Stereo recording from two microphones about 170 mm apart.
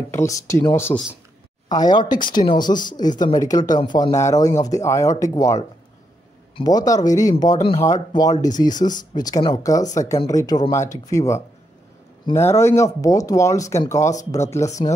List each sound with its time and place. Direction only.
0.1 s speech: 15° left (ahead or behind)
1.7 s speech: 25° left (ahead or behind)
8.8 s speech: 35° left (ahead or behind)
9.1 s speech: 25° left (ahead or behind)